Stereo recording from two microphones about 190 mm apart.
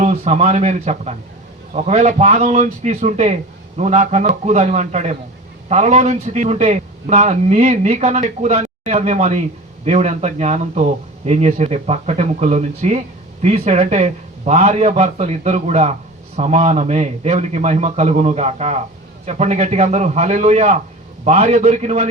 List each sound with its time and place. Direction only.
0.0 s a man's voice: 35° right (ahead or behind)